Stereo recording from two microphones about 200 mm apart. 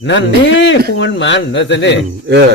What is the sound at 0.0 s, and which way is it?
Speech, 65° left (ahead or behind).